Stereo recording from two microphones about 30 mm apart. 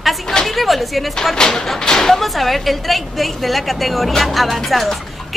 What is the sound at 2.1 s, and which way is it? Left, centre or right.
Speech, centre.